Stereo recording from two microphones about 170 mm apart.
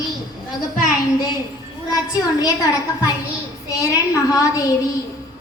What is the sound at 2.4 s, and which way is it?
A woman's voice, 20° left (ahead or behind).